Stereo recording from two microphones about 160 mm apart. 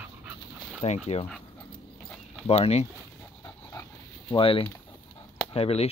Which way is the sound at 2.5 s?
40° left (ahead or behind).